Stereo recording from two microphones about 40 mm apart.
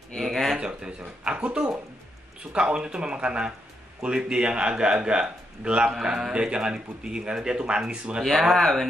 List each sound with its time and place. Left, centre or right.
0.2 s a sound: centre
0.6 s speech: right
5.9 s speech: centre
6.3 s speech: right
8.2 s speech: centre